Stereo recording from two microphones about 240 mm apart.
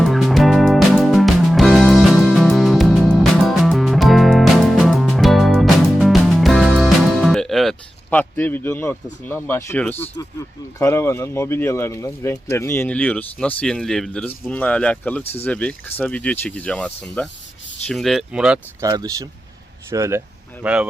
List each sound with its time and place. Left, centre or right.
0.0 s music: centre
9.2 s speech: centre
18.9 s speech: centre